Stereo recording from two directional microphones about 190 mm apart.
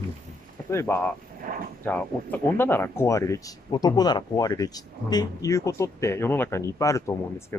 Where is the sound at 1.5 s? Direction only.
45° right (ahead or behind).